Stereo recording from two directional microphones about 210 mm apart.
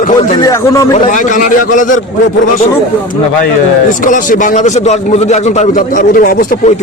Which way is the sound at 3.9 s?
40° left (ahead or behind).